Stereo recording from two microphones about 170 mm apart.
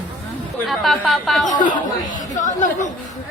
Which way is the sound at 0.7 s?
Centre (ahead or behind).